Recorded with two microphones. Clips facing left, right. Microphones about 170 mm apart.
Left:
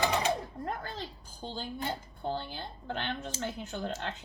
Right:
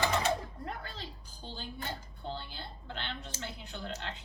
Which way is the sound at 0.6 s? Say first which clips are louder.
Left 5 dB; 45° left (ahead or behind).